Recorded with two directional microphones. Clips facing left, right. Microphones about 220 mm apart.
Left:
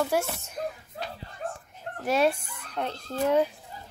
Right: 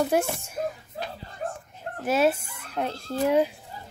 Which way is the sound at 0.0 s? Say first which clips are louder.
Right 3 dB; 15° right (ahead or behind).